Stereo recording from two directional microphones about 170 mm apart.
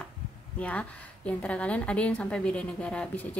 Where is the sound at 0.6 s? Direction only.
5° left (ahead or behind).